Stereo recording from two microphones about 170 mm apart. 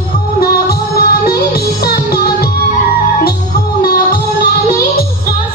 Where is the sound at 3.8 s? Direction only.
65° left (ahead or behind).